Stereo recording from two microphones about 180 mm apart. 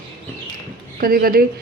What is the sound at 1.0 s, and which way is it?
Speech, 55° right (ahead or behind).